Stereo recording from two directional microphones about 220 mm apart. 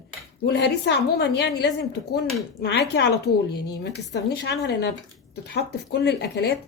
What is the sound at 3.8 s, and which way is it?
Speech, 50° left (ahead or behind).